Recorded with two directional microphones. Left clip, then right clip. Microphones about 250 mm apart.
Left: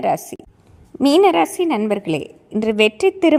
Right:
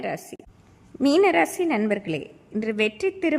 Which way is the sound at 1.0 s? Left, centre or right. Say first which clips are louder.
Left 5 dB; centre.